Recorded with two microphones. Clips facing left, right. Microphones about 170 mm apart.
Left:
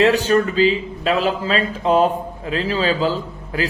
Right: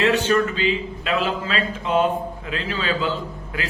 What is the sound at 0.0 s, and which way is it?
Speech, 35° left (ahead or behind).